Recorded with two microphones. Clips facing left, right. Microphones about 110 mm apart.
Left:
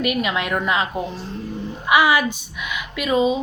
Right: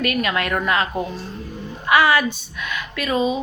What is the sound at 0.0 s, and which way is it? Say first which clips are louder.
Speech: even; 15° left (ahead or behind).